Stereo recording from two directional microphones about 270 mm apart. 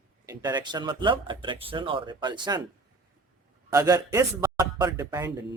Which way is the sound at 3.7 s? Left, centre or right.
Centre.